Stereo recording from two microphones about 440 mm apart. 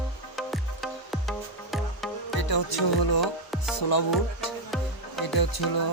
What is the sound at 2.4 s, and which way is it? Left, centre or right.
Music, left.